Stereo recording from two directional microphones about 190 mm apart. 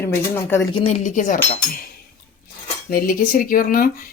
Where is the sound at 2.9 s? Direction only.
50° left (ahead or behind).